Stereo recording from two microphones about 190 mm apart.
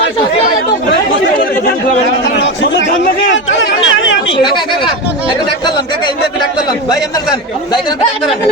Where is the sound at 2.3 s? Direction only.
75° left (ahead or behind).